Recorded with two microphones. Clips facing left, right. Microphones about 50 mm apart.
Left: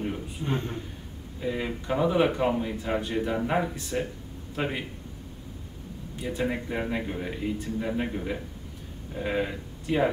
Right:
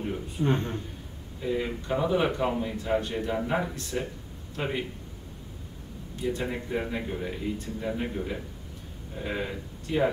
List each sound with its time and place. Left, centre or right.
0.4 s a man's voice: right
1.4 s a man's voice: centre
4.6 s a man's voice: left
6.2 s a man's voice: centre